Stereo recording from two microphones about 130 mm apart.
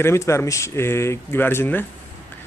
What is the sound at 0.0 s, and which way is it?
Speech, 20° left (ahead or behind).